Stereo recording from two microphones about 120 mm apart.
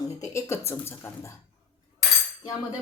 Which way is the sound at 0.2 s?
25° left (ahead or behind).